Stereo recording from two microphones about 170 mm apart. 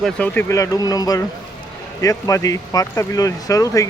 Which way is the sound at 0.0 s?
10° left (ahead or behind).